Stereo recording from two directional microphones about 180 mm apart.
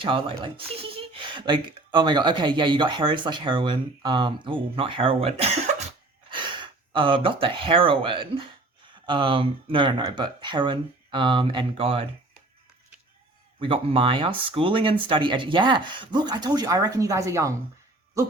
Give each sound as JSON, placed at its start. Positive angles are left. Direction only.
{"t": 0.0, "sound": "speech", "side_deg": -30}
{"t": 13.6, "sound": "speech", "side_deg": -30}